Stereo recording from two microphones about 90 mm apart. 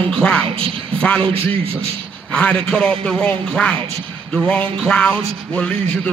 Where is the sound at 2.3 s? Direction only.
10° left (ahead or behind).